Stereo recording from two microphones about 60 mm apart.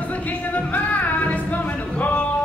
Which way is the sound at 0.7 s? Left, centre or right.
Left.